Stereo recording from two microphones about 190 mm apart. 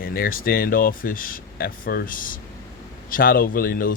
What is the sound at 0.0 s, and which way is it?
Speech, 50° left (ahead or behind).